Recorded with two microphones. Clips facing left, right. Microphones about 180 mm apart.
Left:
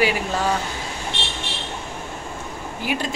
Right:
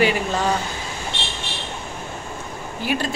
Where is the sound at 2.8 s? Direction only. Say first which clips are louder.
Right 2 dB; 15° left (ahead or behind).